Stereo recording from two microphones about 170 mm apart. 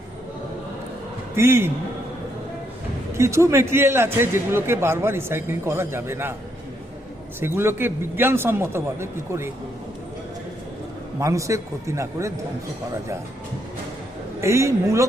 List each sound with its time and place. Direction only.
1.4 s speech: 15° right (ahead or behind)
3.2 s speech: 15° right (ahead or behind)
7.3 s speech: 15° right (ahead or behind)
11.2 s speech: 20° right (ahead or behind)
14.4 s speech: 15° right (ahead or behind)